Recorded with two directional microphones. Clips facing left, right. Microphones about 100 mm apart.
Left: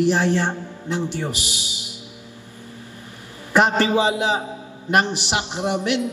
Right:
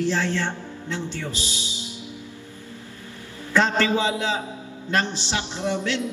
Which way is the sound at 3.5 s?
20° left (ahead or behind).